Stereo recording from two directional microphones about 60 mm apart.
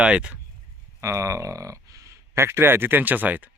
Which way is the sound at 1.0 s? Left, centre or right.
Right.